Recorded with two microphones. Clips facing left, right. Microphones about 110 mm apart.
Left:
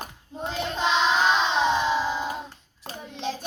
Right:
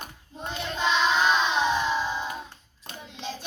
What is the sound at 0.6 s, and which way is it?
Child singing, 20° left (ahead or behind).